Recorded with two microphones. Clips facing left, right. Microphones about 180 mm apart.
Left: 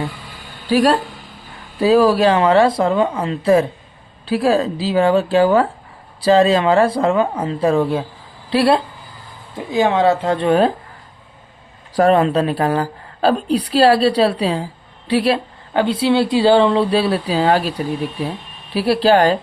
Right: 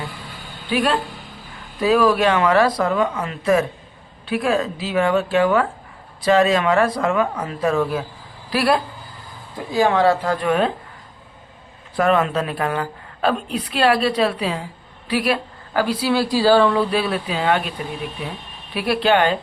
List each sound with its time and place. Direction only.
0.7 s a woman's voice: 40° left (ahead or behind)
11.9 s a woman's voice: 35° left (ahead or behind)